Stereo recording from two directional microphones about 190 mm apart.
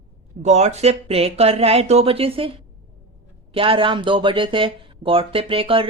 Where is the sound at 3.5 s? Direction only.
30° right (ahead or behind).